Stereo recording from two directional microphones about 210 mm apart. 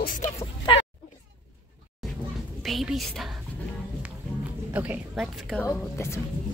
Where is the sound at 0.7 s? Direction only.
25° left (ahead or behind).